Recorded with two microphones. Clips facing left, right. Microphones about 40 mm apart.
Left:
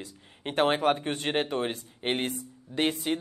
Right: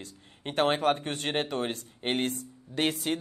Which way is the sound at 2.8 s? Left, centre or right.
Centre.